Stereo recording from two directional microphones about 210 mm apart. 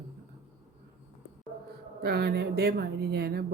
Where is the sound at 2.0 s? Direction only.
50° right (ahead or behind).